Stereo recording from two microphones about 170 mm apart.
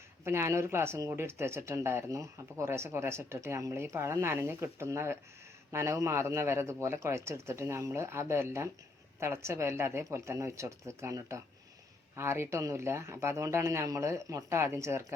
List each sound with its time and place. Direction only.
0.3 s speech: 15° right (ahead or behind)